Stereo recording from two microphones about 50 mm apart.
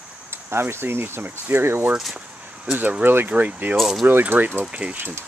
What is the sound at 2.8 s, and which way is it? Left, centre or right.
Speech, right.